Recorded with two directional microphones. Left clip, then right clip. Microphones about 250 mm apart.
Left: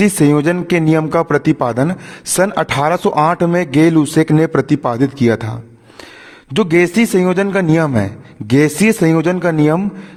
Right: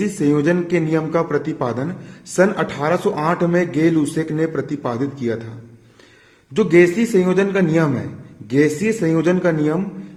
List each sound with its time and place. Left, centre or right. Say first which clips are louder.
0.0 s speech: left 5 dB; left
6.5 s speech: left 1 dB; left